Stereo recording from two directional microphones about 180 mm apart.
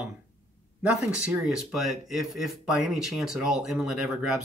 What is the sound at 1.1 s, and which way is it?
Speech, 5° right (ahead or behind).